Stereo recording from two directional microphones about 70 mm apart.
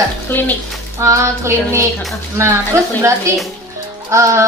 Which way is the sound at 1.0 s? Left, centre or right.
Right.